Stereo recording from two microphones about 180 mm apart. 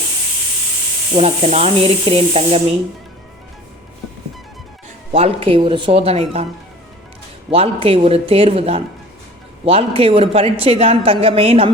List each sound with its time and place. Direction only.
1.1 s a woman's voice: 35° right (ahead or behind)
5.1 s a woman's voice: 30° right (ahead or behind)
7.5 s a woman's voice: 30° right (ahead or behind)